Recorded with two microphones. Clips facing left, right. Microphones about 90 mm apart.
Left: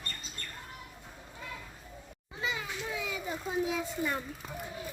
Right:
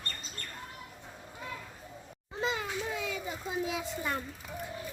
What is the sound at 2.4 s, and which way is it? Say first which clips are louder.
Children playing: right 3 dB; 55° right (ahead or behind).